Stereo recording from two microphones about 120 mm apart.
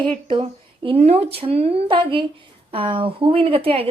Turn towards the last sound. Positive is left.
turn(degrees=-50)  # may be behind; listen again after turning